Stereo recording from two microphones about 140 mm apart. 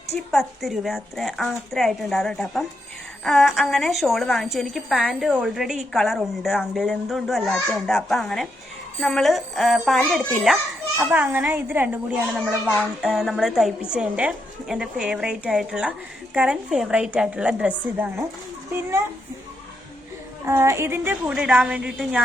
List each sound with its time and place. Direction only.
0.3 s a woman's voice: centre (ahead or behind)
10.9 s a child's voice: 15° right (ahead or behind)
12.6 s a woman's voice: centre (ahead or behind)
20.4 s a woman's voice: 20° right (ahead or behind)